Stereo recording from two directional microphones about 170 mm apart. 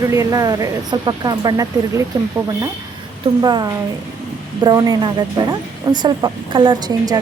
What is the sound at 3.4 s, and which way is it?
Speech, 25° right (ahead or behind).